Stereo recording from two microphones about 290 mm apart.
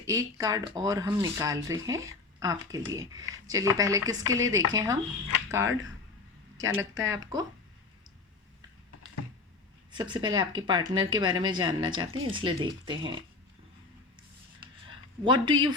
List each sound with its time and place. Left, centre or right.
0.0 s speech: centre
9.9 s speech: centre
15.2 s speech: centre